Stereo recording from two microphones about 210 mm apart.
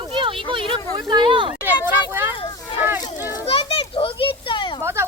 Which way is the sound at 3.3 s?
25° left (ahead or behind).